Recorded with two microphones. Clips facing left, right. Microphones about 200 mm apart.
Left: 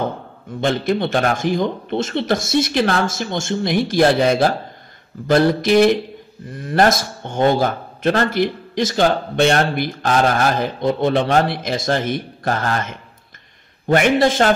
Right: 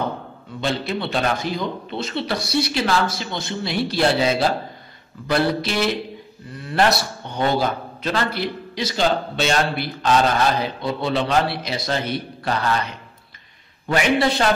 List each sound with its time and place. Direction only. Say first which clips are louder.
0.6 s a man's voice: left 6 dB; 50° left (ahead or behind)
3.7 s speech: left 4 dB; 15° left (ahead or behind)
4.0 s a man's voice: left 4 dB; 55° left (ahead or behind)